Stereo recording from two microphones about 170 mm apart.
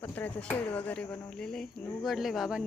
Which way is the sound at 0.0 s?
10° left (ahead or behind).